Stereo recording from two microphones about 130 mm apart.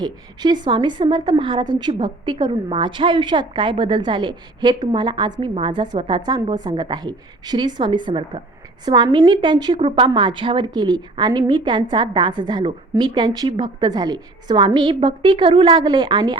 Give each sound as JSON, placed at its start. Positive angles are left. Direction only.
{"t": 0.0, "sound": "a woman's voice", "side_deg": -35}